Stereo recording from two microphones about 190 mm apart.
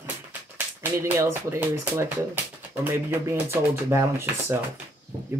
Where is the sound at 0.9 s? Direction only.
15° right (ahead or behind).